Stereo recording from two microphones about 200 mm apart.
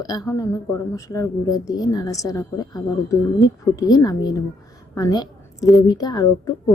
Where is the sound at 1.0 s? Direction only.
15° left (ahead or behind).